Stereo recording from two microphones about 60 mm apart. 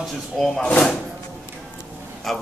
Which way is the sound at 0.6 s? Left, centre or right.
Centre.